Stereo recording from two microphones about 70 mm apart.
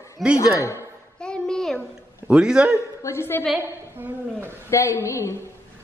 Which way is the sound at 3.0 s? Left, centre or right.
Left.